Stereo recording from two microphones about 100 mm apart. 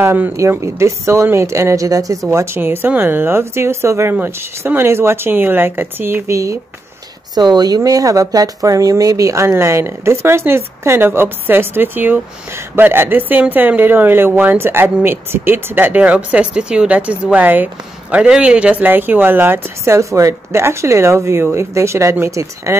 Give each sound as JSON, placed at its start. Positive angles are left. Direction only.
{"t": 0.0, "sound": "speech", "side_deg": -20}
{"t": 7.3, "sound": "speech", "side_deg": -45}